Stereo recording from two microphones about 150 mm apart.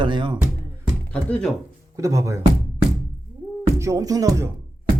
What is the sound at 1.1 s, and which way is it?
Speech, 10° left (ahead or behind).